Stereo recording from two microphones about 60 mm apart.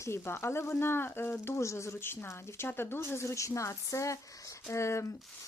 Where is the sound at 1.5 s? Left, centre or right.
Left.